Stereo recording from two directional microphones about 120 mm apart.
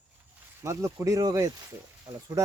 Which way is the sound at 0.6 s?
25° right (ahead or behind).